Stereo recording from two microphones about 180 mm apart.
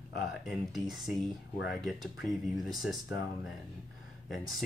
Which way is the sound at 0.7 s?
Centre (ahead or behind).